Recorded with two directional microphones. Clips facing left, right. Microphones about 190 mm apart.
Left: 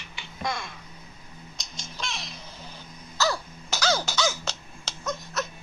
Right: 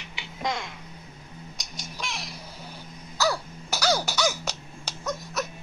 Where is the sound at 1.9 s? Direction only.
10° right (ahead or behind).